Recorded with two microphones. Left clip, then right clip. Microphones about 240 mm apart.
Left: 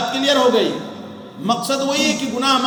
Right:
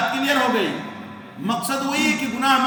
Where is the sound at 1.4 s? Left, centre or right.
Centre.